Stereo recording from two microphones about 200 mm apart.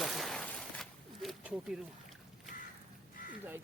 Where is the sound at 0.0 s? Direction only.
Centre (ahead or behind).